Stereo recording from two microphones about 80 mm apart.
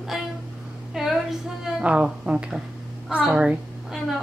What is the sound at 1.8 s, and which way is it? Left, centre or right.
A woman's voice, centre.